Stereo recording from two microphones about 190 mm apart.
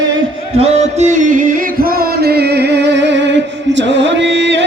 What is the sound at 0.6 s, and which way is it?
Music, 35° right (ahead or behind).